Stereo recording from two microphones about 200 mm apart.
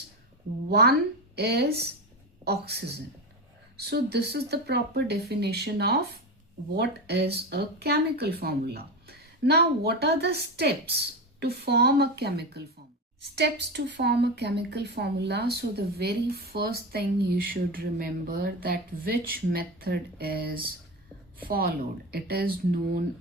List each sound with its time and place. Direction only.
0.7 s speech: 50° right (ahead or behind)